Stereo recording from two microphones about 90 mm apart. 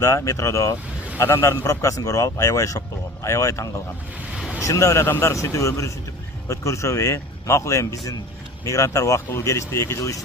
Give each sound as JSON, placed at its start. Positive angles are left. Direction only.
{"t": 0.0, "sound": "speech", "side_deg": 35}